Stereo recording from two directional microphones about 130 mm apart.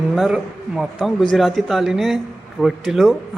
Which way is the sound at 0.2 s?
5° right (ahead or behind).